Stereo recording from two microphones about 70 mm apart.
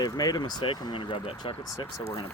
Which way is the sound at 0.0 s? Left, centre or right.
Left.